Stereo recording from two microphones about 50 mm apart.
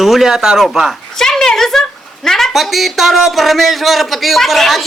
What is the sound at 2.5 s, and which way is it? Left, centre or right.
Speech, centre.